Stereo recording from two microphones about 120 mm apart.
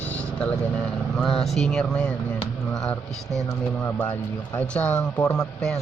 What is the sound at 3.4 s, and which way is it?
Speech, 20° left (ahead or behind).